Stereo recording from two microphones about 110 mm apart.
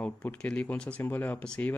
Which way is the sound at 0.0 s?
10° left (ahead or behind).